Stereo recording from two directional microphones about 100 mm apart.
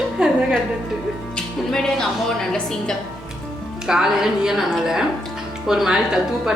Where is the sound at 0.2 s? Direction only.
5° right (ahead or behind).